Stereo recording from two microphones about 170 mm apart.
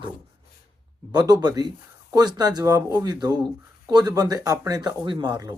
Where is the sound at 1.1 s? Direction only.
25° right (ahead or behind).